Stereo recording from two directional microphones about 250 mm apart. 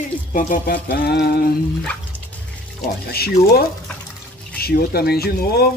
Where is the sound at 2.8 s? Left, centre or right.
Left.